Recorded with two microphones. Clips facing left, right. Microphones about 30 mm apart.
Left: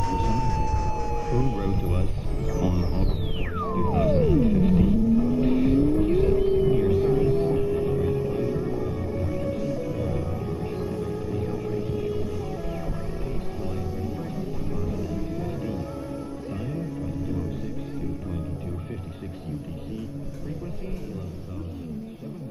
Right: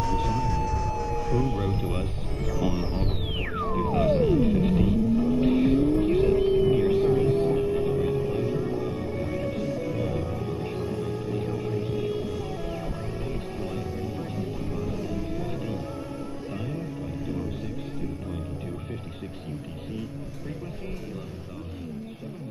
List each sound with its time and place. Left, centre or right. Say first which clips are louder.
0.0 s siren: even; centre
1.6 s a sound: left 1 dB; centre
1.9 s music: left 1 dB; right
2.5 s music: left 1 dB; right
3.1 s music: even; right
5.2 s vehicle: even; right
7.2 s music: even; right
8.4 s music: left 1 dB; right
15.4 s music: left 1 dB; right